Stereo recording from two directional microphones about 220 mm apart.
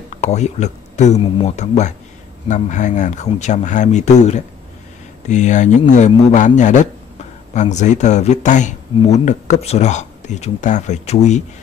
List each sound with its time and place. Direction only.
0.1 s speech: 30° left (ahead or behind)